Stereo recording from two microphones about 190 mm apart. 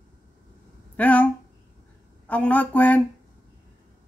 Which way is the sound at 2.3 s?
10° left (ahead or behind).